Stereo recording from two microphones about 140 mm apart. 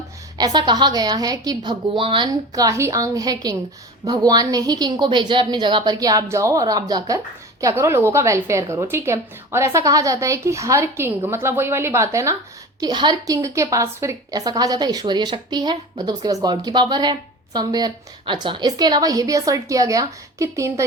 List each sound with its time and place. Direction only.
0.3 s a woman's voice: 30° right (ahead or behind)